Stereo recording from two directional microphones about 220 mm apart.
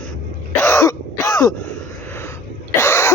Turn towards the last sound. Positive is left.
turn(degrees=10)  # may be behind; listen again after turning